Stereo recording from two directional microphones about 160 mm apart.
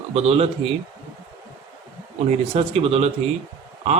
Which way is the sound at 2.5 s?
40° right (ahead or behind).